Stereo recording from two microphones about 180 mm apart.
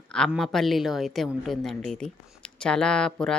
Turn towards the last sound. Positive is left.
turn(degrees=5)  # may be behind; listen again after turning